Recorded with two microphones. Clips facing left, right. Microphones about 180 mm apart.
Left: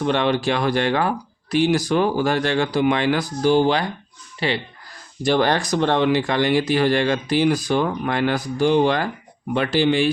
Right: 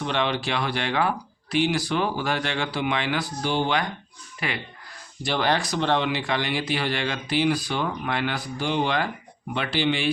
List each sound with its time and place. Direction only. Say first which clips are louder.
0.0 s speech: left 6 dB; 45° left (ahead or behind)
5.2 s speech: left 6 dB; 45° left (ahead or behind)